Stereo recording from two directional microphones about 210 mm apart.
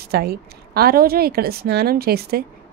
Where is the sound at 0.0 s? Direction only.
50° right (ahead or behind).